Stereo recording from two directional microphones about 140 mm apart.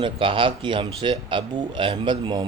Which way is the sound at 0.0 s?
40° right (ahead or behind).